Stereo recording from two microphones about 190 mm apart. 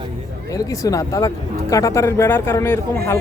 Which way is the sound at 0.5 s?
15° left (ahead or behind).